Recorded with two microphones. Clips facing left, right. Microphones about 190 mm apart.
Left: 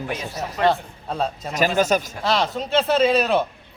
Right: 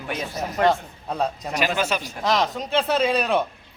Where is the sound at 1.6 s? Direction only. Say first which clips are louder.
Left 5 dB; 40° left (ahead or behind).